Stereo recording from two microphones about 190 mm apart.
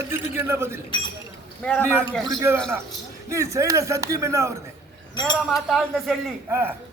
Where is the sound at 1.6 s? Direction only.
5° left (ahead or behind).